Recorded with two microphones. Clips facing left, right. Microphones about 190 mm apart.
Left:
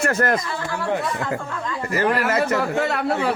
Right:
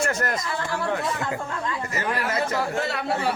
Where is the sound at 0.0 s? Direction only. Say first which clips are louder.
Left 5 dB; 55° left (ahead or behind).